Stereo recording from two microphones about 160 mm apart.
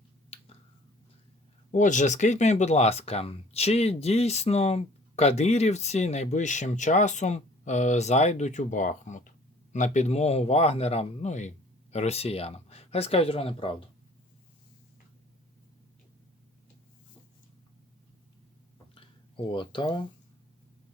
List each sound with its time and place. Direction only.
0.3 s finger snapping: 35° left (ahead or behind)
1.7 s speech: 50° left (ahead or behind); by 13.8 s 35° left (ahead or behind)
18.9 s a sound: 35° left (ahead or behind)